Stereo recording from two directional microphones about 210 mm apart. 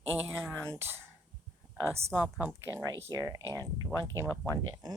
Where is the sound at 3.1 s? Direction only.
15° right (ahead or behind).